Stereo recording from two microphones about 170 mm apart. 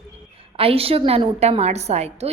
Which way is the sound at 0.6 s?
35° right (ahead or behind).